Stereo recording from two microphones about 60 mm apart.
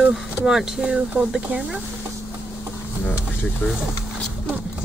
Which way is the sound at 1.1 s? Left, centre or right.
Centre.